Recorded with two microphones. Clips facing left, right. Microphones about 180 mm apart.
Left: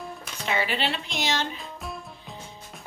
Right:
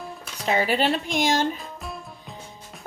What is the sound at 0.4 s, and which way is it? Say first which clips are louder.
Speech: right 5 dB; 40° right (ahead or behind).